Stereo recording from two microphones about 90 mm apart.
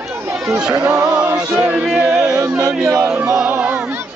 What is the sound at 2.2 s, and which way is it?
Music, 40° right (ahead or behind).